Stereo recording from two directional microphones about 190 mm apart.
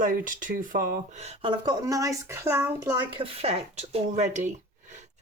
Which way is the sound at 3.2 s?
30° right (ahead or behind).